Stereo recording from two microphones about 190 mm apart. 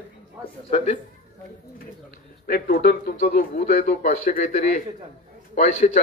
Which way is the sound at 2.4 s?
50° left (ahead or behind).